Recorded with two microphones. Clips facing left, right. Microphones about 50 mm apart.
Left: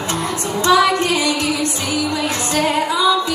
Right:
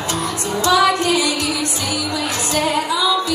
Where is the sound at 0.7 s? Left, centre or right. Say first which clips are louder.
Left 1 dB; left.